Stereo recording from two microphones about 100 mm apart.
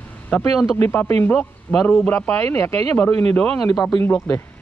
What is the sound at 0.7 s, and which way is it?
Speech, 25° left (ahead or behind).